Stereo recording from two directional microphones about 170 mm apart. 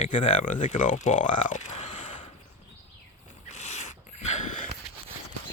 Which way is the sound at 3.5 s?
40° left (ahead or behind).